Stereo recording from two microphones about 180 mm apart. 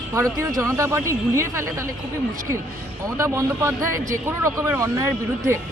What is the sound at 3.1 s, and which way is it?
A man's voice, 15° right (ahead or behind).